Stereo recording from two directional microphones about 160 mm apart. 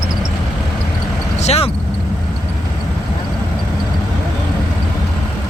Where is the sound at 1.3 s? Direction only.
40° left (ahead or behind).